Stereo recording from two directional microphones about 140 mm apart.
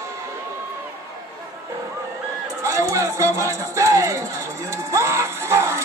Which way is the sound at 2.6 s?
20° right (ahead or behind).